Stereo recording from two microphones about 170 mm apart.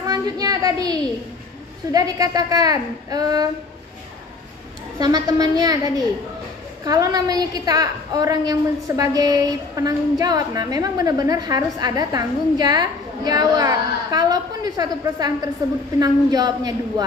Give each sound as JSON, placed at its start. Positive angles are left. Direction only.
{"t": 0.0, "sound": "child singing", "side_deg": -20}
{"t": 1.9, "sound": "a woman's voice", "side_deg": -20}
{"t": 4.9, "sound": "a woman's voice", "side_deg": -20}